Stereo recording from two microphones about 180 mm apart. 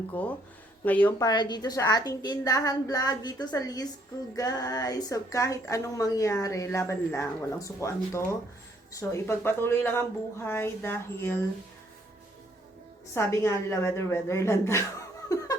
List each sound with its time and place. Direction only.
0.1 s speech: 10° left (ahead or behind)
1.2 s a woman's voice: 25° left (ahead or behind)
13.1 s speech: 15° left (ahead or behind)
15.3 s laughter: 20° left (ahead or behind)